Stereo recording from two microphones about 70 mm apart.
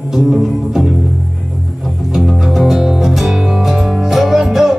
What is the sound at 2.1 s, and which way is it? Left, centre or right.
Music, centre.